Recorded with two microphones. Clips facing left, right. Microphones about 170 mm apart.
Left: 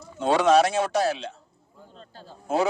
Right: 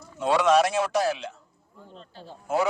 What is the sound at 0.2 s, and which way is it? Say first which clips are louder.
Speech: left 2 dB; 30° left (ahead or behind).